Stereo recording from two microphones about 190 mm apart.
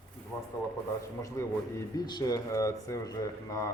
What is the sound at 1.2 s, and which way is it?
Speech, 15° left (ahead or behind).